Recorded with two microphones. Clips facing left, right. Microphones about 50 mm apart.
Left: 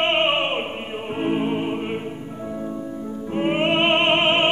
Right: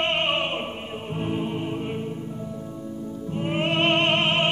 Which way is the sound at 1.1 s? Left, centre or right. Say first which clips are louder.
Left 6 dB; left.